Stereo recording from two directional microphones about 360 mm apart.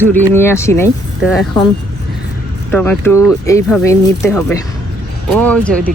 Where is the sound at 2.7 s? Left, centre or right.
Centre.